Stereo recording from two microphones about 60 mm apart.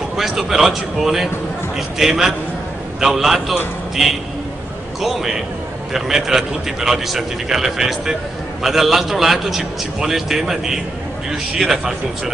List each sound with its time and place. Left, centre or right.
0.2 s a man's voice: centre